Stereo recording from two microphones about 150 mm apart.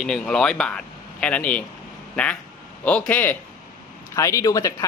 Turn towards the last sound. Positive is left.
turn(degrees=25)  # may be behind; listen again after turning